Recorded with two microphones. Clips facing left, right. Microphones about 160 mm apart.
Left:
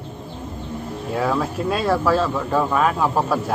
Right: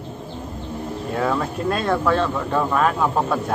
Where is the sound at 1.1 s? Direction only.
Centre (ahead or behind).